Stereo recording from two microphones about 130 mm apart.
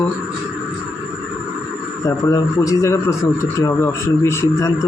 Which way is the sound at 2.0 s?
25° left (ahead or behind).